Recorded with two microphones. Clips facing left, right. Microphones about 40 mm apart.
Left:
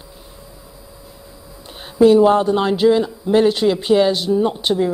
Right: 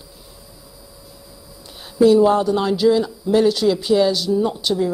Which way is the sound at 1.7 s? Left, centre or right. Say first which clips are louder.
Left 2 dB; left.